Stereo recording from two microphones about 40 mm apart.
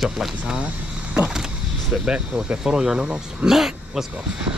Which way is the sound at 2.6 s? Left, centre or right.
Centre.